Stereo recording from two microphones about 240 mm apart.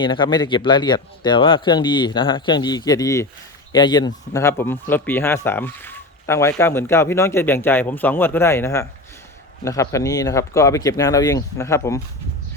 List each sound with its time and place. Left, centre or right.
0.0 s speech: centre